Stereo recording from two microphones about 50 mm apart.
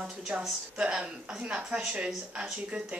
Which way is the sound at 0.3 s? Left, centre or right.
Right.